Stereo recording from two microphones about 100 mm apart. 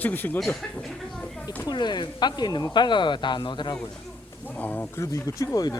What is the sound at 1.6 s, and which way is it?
Speech, 45° left (ahead or behind).